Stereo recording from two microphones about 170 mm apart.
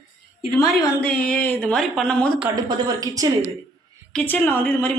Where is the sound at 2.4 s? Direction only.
20° right (ahead or behind).